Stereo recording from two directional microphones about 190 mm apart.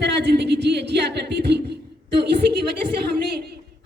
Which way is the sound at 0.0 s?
60° right (ahead or behind).